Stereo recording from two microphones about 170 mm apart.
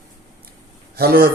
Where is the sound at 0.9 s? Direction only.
60° right (ahead or behind).